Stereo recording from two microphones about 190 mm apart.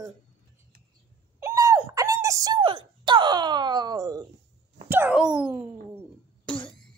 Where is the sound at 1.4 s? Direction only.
20° right (ahead or behind).